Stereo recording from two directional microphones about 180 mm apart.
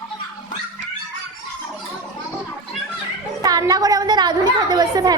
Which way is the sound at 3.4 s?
20° right (ahead or behind).